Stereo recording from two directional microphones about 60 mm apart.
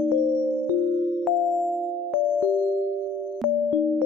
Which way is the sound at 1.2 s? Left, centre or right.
Centre.